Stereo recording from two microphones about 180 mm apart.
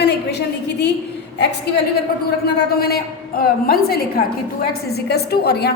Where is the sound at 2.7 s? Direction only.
60° left (ahead or behind).